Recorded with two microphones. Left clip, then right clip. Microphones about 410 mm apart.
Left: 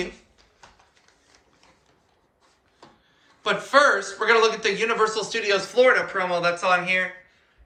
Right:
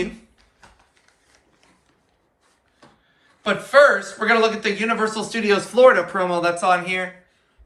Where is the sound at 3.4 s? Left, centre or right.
Centre.